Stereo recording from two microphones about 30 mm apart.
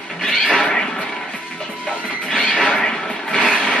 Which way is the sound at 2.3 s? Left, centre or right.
Centre.